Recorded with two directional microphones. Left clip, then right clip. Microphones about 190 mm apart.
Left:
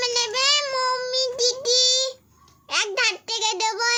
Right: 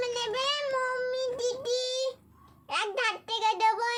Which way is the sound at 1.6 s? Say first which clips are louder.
Left 13 dB; 45° left (ahead or behind).